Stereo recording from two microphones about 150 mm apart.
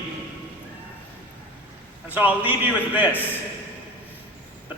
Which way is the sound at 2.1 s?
10° right (ahead or behind).